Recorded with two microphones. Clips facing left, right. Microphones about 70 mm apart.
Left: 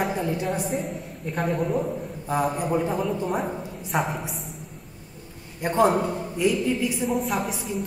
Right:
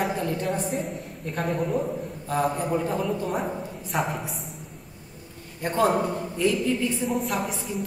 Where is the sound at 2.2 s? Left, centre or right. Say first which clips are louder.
Left 1 dB; centre.